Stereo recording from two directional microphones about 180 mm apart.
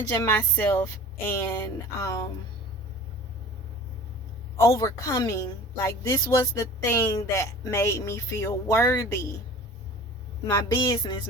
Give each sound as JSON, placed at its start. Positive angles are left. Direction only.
{"t": 0.1, "sound": "a woman's voice", "side_deg": 15}
{"t": 4.5, "sound": "a woman's voice", "side_deg": 20}
{"t": 10.4, "sound": "a sound", "side_deg": 20}